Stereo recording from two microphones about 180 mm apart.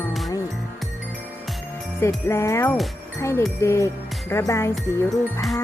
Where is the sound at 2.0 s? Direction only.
15° left (ahead or behind).